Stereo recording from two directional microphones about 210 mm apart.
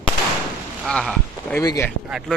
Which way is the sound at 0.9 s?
5° left (ahead or behind).